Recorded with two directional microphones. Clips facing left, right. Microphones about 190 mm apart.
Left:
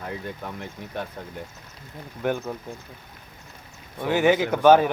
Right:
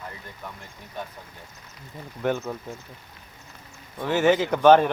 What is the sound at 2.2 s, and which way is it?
Speech, 10° left (ahead or behind).